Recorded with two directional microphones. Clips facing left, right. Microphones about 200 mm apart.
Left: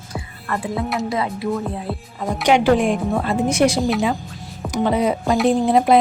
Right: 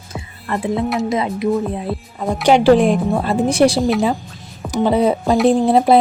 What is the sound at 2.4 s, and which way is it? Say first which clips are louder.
A woman's voice: right 4 dB; 35° right (ahead or behind).